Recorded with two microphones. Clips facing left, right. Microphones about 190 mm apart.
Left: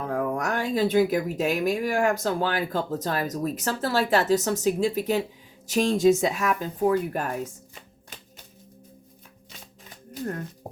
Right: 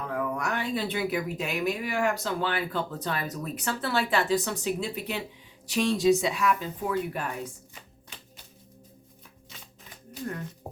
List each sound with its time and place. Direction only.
0.0 s speech: 45° left (ahead or behind)